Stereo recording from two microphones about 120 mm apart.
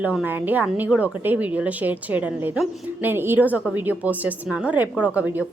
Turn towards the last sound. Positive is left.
turn(degrees=-15)  # may be behind; listen again after turning